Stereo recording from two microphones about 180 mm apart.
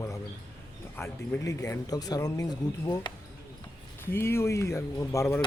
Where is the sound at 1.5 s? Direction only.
20° left (ahead or behind).